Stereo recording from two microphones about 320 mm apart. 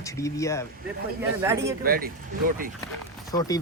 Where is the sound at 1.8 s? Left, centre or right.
Right.